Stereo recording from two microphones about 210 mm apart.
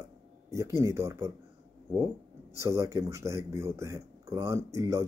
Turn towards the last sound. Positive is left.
turn(degrees=-15)  # may be behind; listen again after turning